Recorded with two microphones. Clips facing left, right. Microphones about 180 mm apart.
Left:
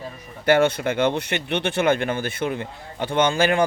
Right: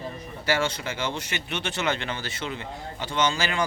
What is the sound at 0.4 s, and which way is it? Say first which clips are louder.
Speech: left 9 dB; 55° left (ahead or behind).